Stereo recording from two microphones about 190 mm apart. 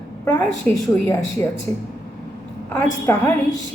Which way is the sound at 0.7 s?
10° left (ahead or behind).